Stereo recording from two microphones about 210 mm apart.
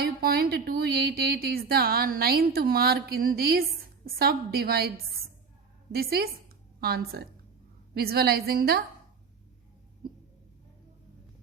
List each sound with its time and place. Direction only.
0.0 s a woman's voice: 45° right (ahead or behind)
5.9 s a woman's voice: 50° right (ahead or behind)